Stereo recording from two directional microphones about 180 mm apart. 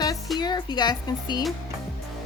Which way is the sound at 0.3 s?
25° left (ahead or behind).